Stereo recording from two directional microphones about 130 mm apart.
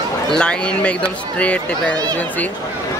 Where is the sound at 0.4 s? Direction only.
5° left (ahead or behind).